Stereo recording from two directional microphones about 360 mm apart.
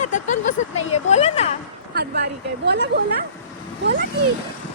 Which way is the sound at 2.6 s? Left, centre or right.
Right.